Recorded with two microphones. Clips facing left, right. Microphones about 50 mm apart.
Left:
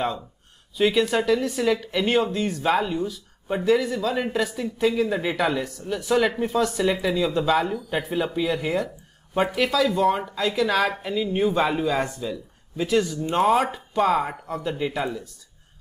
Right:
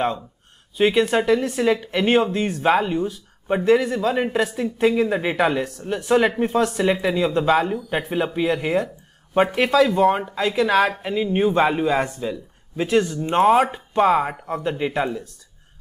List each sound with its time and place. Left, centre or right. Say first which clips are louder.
0.7 s speech: right 3 dB; right